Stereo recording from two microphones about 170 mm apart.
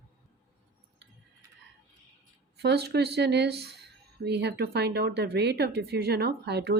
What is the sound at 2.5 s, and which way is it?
Speech, 70° right (ahead or behind).